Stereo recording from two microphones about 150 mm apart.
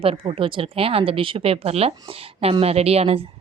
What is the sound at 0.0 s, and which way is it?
Speech, 40° right (ahead or behind).